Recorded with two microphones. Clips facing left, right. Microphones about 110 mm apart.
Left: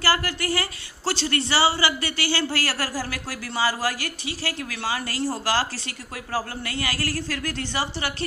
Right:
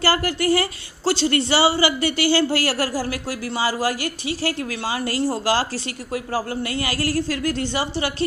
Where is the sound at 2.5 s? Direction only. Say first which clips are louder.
Right 5 dB; 25° right (ahead or behind).